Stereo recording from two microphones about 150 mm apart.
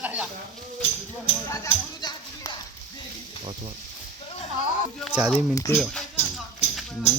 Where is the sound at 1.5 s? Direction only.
25° left (ahead or behind).